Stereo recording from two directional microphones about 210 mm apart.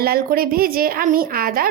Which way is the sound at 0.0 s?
45° right (ahead or behind).